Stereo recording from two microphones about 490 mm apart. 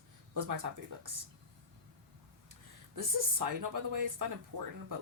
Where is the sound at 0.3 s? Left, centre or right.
Right.